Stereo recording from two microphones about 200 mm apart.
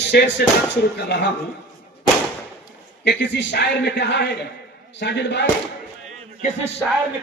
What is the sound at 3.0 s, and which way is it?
Speech, 60° left (ahead or behind).